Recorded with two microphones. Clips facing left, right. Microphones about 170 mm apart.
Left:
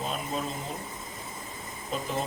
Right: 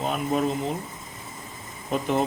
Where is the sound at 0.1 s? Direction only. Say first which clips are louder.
Right 8 dB; 65° right (ahead or behind).